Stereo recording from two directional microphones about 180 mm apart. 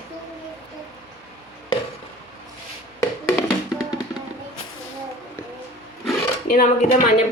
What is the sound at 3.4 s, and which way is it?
Music, 20° left (ahead or behind).